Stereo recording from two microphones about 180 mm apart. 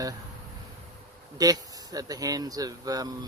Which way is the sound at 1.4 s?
20° right (ahead or behind).